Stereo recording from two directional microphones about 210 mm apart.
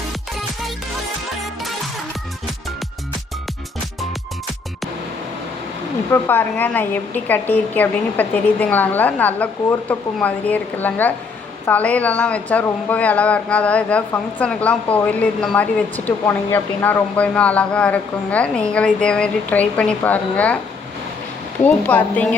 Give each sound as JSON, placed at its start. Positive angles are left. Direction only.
{"t": 6.1, "sound": "speech", "side_deg": 10}
{"t": 21.6, "sound": "speech", "side_deg": 5}